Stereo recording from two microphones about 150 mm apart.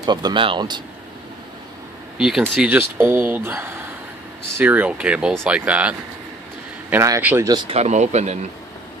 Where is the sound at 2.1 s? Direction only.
5° right (ahead or behind).